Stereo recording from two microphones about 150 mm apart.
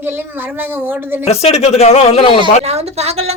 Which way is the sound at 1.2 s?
45° left (ahead or behind).